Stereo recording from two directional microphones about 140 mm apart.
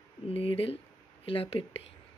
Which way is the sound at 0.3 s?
40° left (ahead or behind).